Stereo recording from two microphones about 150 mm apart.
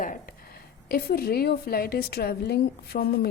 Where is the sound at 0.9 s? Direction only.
90° left.